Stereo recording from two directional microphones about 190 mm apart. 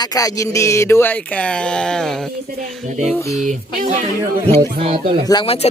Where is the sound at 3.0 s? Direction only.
15° left (ahead or behind).